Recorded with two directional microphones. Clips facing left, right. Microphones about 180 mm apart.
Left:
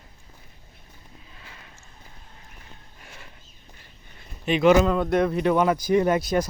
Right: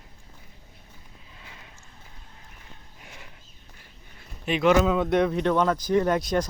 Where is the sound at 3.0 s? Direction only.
15° right (ahead or behind).